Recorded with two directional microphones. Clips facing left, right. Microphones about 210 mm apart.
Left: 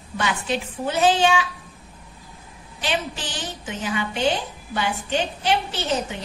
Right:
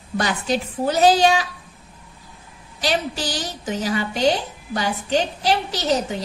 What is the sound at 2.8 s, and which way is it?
A woman's voice, 40° right (ahead or behind).